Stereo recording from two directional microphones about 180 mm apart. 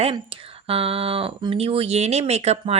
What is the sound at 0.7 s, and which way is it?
Speech, 30° right (ahead or behind).